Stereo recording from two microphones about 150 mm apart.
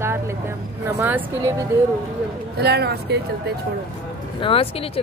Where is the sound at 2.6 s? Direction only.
90° right.